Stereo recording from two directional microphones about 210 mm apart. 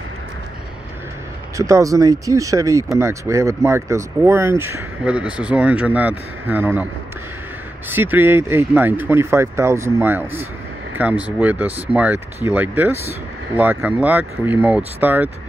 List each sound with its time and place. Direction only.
1.6 s speech: 15° right (ahead or behind)
7.9 s speech: 10° right (ahead or behind)